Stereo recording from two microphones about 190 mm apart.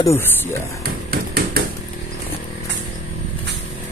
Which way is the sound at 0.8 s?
50° right (ahead or behind).